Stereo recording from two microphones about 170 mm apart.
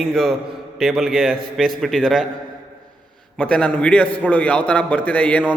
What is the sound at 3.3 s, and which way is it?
A man's voice, 5° left (ahead or behind).